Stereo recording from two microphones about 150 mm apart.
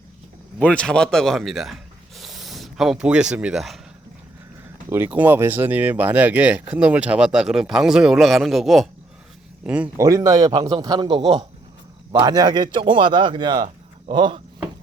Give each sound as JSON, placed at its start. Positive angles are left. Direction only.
{"t": 0.6, "sound": "speech", "side_deg": 5}
{"t": 4.9, "sound": "speech", "side_deg": -15}
{"t": 10.0, "sound": "a man's voice", "side_deg": -20}